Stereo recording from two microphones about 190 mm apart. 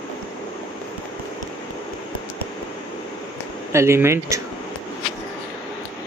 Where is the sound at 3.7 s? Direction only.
15° right (ahead or behind).